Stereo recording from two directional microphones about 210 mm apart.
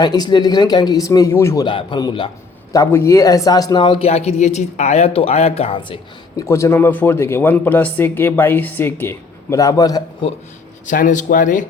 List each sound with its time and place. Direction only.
0.0 s a man's voice: 20° left (ahead or behind)
10.8 s speech: 40° left (ahead or behind)